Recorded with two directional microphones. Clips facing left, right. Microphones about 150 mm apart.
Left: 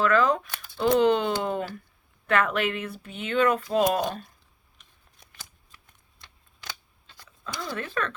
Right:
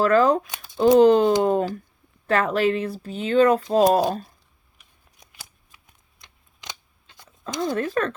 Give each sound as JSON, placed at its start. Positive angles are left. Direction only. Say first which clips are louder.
{"t": 0.0, "sound": "speech", "louder": "right 5 dB", "side_deg": -40}
{"t": 1.4, "sound": "a sound", "louder": "right 8 dB", "side_deg": -40}
{"t": 2.2, "sound": "speech", "louder": "right 4 dB", "side_deg": -35}
{"t": 5.7, "sound": "shuffling cards", "louder": "even", "side_deg": -15}
{"t": 7.6, "sound": "speech", "louder": "right 8 dB", "side_deg": -40}